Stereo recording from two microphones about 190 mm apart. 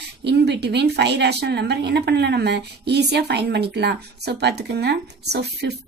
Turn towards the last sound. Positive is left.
turn(degrees=-60)  # may be behind; listen again after turning